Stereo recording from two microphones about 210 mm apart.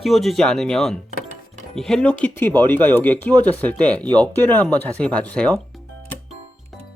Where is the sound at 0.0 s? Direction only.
Centre (ahead or behind).